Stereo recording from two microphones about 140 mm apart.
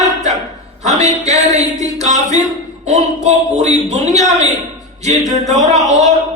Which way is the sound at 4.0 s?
25° left (ahead or behind).